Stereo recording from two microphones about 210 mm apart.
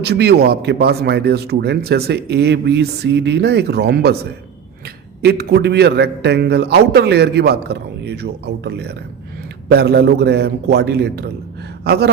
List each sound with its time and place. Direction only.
0.0 s speech: 50° right (ahead or behind)
5.2 s speech: 50° right (ahead or behind)